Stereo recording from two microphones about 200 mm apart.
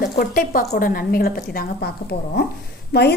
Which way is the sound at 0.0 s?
45° left (ahead or behind).